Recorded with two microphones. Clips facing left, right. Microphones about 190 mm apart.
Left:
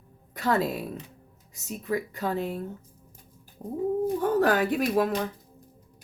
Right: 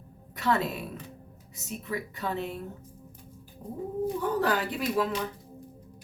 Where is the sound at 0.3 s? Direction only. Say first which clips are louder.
Left 2 dB; 40° left (ahead or behind).